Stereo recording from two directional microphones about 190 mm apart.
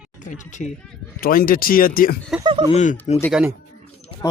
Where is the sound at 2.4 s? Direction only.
25° right (ahead or behind).